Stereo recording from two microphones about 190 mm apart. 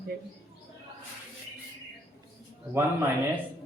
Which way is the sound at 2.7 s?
10° right (ahead or behind).